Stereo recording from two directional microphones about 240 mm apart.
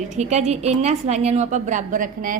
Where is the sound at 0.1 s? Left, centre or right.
Right.